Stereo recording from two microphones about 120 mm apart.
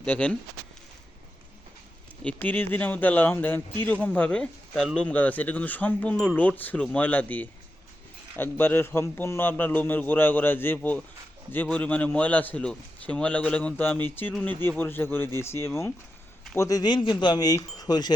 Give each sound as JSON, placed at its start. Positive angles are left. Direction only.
{"t": 0.0, "sound": "a man's voice", "side_deg": 10}
{"t": 2.2, "sound": "a man's voice", "side_deg": 15}